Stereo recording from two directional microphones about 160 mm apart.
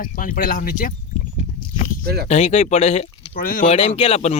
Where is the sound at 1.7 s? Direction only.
55° left (ahead or behind).